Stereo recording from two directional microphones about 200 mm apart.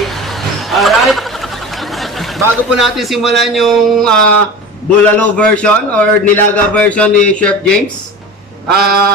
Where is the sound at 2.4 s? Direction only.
Centre (ahead or behind).